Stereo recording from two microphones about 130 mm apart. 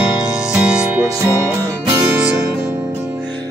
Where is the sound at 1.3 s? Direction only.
25° right (ahead or behind).